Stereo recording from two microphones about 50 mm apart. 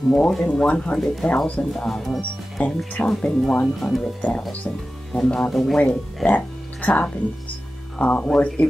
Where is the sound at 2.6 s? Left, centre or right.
Left.